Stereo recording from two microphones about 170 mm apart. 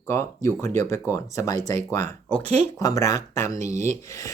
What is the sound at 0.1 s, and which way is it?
Speech, 15° left (ahead or behind).